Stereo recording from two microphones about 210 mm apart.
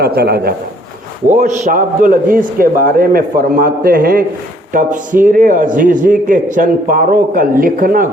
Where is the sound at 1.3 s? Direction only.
35° right (ahead or behind).